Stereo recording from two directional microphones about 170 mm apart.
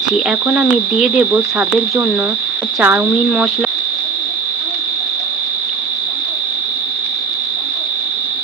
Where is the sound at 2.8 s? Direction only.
10° right (ahead or behind).